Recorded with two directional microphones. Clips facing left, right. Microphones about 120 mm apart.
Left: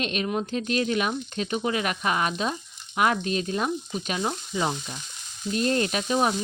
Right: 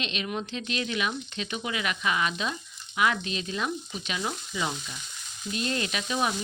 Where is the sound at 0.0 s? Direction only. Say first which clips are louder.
Left 5 dB; 45° left (ahead or behind).